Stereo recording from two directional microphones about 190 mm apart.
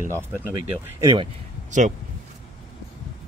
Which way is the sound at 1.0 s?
25° right (ahead or behind).